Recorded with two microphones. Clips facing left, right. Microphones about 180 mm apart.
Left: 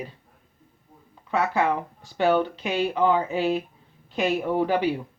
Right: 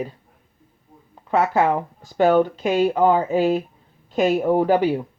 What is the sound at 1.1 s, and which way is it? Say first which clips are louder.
A woman's voice: right 5 dB; 45° right (ahead or behind).